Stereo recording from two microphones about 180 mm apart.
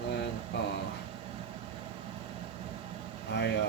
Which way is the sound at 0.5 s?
75° left (ahead or behind).